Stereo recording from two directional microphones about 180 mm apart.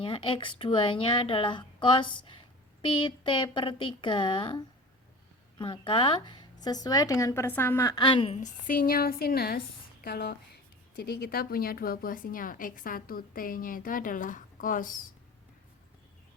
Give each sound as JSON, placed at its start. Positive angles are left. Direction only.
{"t": 0.0, "sound": "speech", "side_deg": 30}
{"t": 8.4, "sound": "a woman's voice", "side_deg": 50}